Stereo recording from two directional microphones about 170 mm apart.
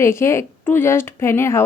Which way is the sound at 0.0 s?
15° left (ahead or behind).